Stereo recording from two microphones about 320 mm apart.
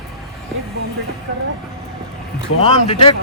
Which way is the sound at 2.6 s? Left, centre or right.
Centre.